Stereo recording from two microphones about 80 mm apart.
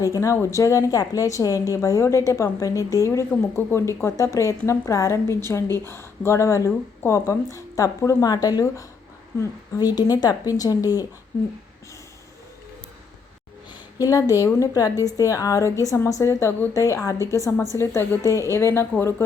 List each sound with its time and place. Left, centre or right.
0.0 s a woman's voice: left
3.3 s speech: centre
3.7 s a woman's voice: left
14.0 s a woman's voice: left